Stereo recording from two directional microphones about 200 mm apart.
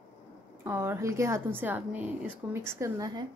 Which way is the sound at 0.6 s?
10° right (ahead or behind).